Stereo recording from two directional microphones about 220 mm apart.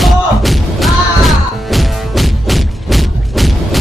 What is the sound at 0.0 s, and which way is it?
Music, centre (ahead or behind).